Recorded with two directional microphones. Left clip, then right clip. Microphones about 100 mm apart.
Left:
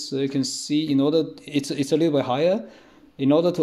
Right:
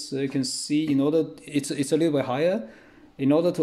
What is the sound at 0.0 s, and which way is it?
A man's voice, 40° left (ahead or behind).